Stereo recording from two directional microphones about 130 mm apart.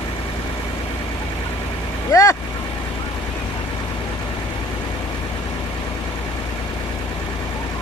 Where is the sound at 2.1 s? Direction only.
30° left (ahead or behind).